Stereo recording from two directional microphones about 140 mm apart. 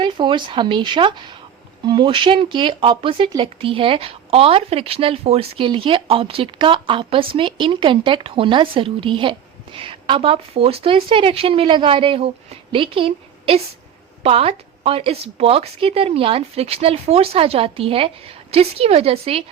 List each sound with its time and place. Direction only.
0.0 s a woman's voice: 35° right (ahead or behind)